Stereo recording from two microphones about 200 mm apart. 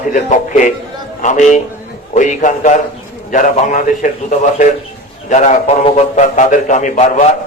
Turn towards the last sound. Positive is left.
turn(degrees=35)  # may be behind; listen again after turning